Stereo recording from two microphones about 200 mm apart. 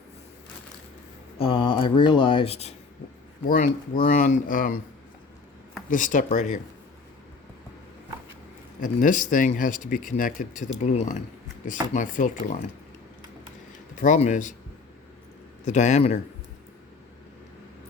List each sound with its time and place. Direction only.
1.4 s speech: 25° left (ahead or behind)
4.0 s speech: 45° left (ahead or behind)
5.9 s speech: 40° left (ahead or behind)
8.8 s speech: 40° left (ahead or behind)
14.0 s speech: 40° left (ahead or behind)
15.6 s speech: 35° left (ahead or behind)